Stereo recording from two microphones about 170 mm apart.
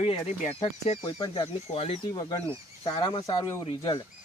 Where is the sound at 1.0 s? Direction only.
25° left (ahead or behind).